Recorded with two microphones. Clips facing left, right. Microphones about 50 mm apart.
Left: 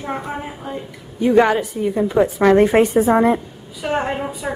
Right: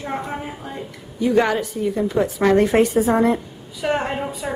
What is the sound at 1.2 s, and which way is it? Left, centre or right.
A woman's voice, centre.